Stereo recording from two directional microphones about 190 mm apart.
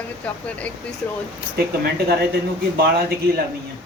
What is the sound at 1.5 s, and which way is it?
Speech, 55° right (ahead or behind).